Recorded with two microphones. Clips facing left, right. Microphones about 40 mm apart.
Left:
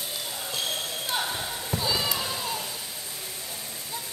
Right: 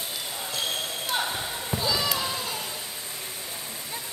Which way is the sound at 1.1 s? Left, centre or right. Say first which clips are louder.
Right 1 dB; centre.